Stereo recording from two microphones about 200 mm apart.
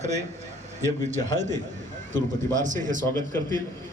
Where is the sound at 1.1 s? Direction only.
35° right (ahead or behind).